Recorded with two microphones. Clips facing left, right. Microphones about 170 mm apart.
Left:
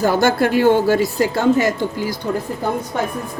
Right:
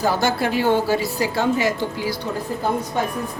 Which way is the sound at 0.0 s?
50° left (ahead or behind).